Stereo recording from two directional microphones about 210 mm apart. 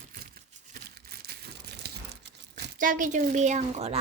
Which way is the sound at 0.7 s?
45° right (ahead or behind).